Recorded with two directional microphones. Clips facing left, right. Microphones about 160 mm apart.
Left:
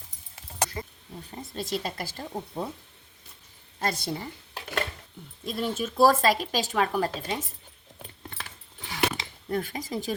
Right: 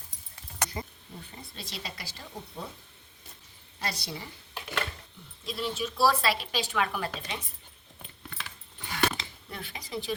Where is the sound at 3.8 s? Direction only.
50° left (ahead or behind).